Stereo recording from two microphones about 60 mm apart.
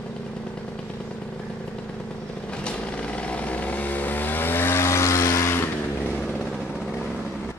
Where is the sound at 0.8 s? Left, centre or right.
Centre.